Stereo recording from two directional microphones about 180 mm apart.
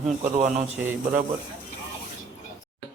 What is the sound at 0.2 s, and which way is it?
Speech, 40° right (ahead or behind).